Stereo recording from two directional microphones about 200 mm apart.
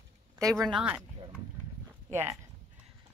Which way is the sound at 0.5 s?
Centre (ahead or behind).